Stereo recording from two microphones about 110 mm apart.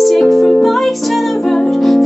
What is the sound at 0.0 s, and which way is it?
Music, centre (ahead or behind).